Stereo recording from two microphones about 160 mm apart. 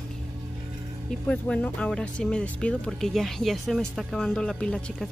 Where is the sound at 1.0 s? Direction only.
10° left (ahead or behind).